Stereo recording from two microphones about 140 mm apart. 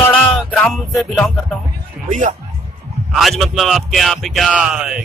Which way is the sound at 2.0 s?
65° right (ahead or behind).